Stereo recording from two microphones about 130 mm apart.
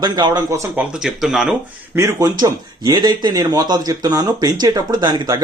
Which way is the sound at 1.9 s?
25° right (ahead or behind).